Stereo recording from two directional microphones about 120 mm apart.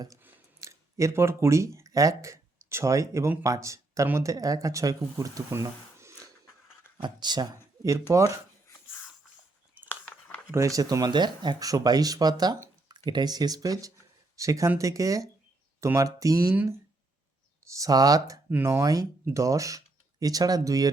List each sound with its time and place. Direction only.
0.2 s speech: 20° right (ahead or behind)
7.0 s speech: 35° right (ahead or behind)
9.9 s a sound: 15° left (ahead or behind)
10.5 s speech: 25° right (ahead or behind)
17.7 s speech: 30° right (ahead or behind)